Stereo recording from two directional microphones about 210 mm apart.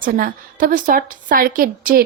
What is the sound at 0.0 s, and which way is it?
A woman's voice, 40° right (ahead or behind).